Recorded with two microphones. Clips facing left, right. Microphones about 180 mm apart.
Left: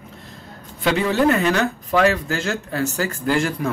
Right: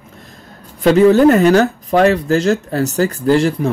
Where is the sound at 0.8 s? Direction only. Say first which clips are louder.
Right 9 dB; 40° right (ahead or behind).